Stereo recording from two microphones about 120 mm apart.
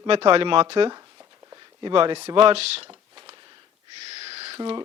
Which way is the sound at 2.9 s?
40° right (ahead or behind).